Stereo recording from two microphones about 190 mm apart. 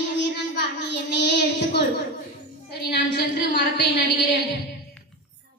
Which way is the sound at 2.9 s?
60° left (ahead or behind).